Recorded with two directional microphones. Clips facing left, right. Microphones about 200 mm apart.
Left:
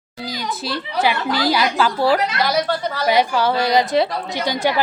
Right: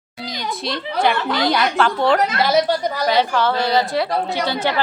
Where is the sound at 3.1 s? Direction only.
10° left (ahead or behind).